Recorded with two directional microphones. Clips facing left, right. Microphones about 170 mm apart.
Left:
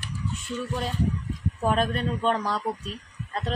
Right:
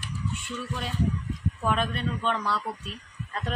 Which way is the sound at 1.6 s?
40° left (ahead or behind).